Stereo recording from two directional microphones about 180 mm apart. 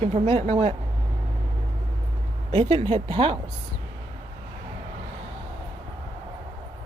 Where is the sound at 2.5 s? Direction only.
30° right (ahead or behind).